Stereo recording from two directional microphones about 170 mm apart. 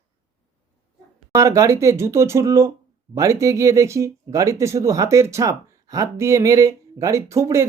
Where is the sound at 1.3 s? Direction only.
15° right (ahead or behind).